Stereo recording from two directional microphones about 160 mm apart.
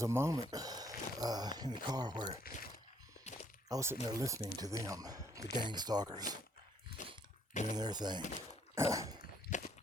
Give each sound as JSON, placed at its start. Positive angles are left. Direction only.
{"t": 0.0, "sound": "speech", "side_deg": -15}
{"t": 3.3, "sound": "a sound", "side_deg": 45}
{"t": 3.7, "sound": "speech", "side_deg": -20}
{"t": 7.0, "sound": "a sound", "side_deg": 50}
{"t": 7.5, "sound": "speech", "side_deg": 50}
{"t": 7.8, "sound": "speech", "side_deg": -25}
{"t": 8.7, "sound": "dog", "side_deg": -20}
{"t": 9.5, "sound": "walk", "side_deg": 55}